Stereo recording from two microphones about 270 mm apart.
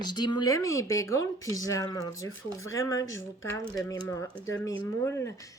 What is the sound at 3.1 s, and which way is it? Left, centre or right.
Speech, left.